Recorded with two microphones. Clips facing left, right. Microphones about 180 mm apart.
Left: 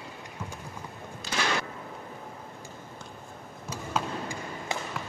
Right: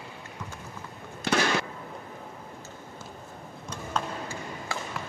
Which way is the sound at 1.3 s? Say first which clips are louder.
Right 8 dB; 70° right (ahead or behind).